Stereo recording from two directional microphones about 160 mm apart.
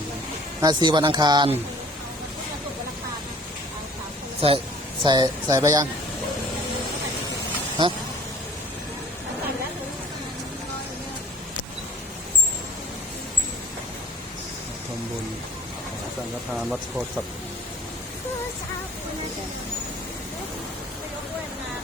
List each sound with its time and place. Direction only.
0.6 s speech: 25° right (ahead or behind)
4.4 s speech: 35° right (ahead or behind)